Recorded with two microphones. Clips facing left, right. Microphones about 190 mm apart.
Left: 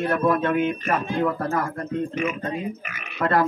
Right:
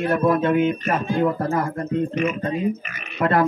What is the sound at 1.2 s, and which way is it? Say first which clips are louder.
Speech: right 3 dB; 20° right (ahead or behind).